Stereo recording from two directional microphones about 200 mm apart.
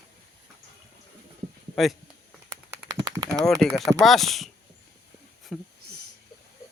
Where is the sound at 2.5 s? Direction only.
20° right (ahead or behind).